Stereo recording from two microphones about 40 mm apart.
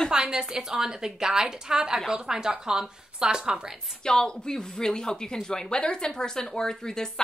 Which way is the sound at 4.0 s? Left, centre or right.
Centre.